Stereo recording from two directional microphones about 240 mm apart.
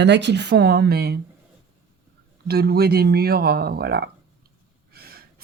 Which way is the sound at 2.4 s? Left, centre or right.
Right.